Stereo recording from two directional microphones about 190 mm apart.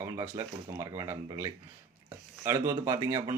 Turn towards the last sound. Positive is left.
turn(degrees=-15)  # may be behind; listen again after turning